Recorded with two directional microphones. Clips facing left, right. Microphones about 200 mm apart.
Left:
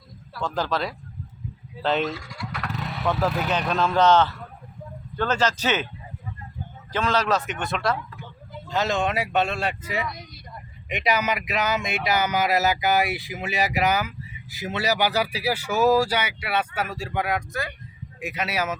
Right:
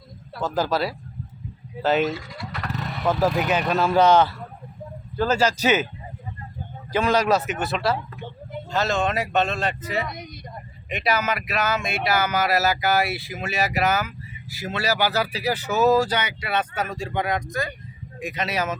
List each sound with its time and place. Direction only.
0.4 s a man's voice: 5° right (ahead or behind)
6.9 s a man's voice: 10° right (ahead or behind)
7.9 s a sound: 25° right (ahead or behind)
8.7 s speech: 15° left (ahead or behind)